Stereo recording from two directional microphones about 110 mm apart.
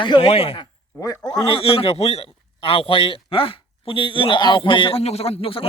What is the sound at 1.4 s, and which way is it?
A man's voice, 50° left (ahead or behind).